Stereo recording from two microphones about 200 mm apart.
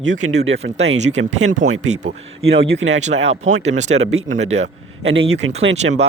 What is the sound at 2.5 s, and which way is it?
Speech, 65° right (ahead or behind).